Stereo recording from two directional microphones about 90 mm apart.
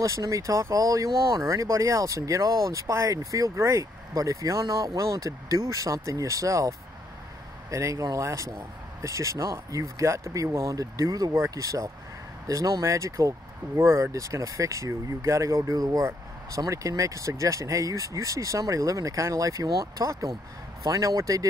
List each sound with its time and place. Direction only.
0.0 s speech: 35° right (ahead or behind)
7.7 s speech: 35° right (ahead or behind)